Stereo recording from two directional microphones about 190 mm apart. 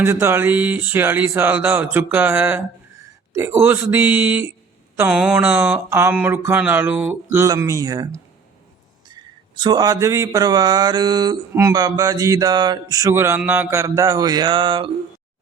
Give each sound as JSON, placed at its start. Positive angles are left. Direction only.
{"t": 0.0, "sound": "speech", "side_deg": -15}
{"t": 9.6, "sound": "mantra", "side_deg": -20}